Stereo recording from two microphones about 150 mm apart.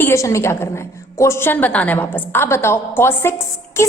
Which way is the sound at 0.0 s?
20° left (ahead or behind).